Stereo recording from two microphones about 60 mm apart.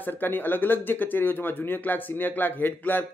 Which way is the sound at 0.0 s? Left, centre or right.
Left.